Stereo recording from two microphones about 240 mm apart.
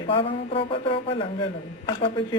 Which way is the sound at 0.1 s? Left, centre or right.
Left.